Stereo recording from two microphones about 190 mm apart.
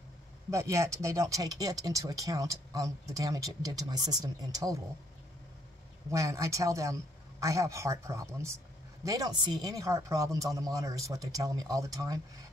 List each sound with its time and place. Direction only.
0.5 s speech: 15° right (ahead or behind)
6.0 s speech: 15° right (ahead or behind)